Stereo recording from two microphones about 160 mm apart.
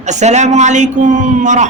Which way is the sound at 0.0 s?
45° right (ahead or behind).